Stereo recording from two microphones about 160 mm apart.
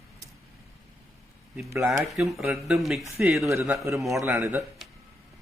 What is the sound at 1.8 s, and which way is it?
Speech, centre (ahead or behind).